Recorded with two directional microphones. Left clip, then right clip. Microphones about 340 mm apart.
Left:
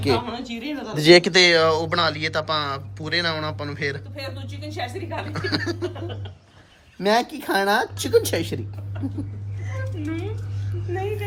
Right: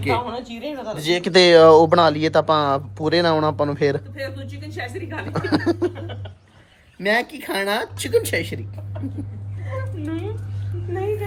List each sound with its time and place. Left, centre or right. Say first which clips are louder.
0.1 s speech: right 1 dB; centre
0.9 s speech: left 10 dB; left
1.2 s speech: right 5 dB; centre
4.7 s speech: left 1 dB; centre
5.3 s speech: right 6 dB; centre
7.0 s speech: even; centre
9.6 s a sound: right 2 dB; centre